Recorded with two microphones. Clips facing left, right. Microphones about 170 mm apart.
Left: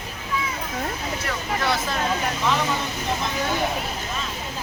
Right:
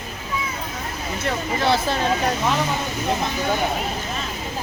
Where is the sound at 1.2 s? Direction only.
30° right (ahead or behind).